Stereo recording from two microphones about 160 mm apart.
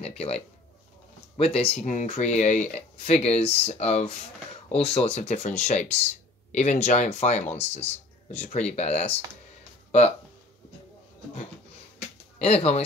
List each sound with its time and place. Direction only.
0.0 s speech: 40° left (ahead or behind)
9.8 s music: 40° left (ahead or behind)
12.4 s speech: 40° left (ahead or behind)